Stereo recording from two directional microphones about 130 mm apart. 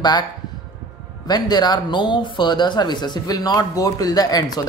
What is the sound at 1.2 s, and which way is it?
Speech, 30° left (ahead or behind).